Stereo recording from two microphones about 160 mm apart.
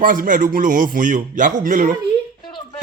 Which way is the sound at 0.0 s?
55° right (ahead or behind).